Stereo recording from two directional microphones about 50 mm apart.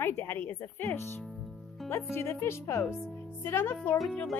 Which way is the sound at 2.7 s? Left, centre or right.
Left.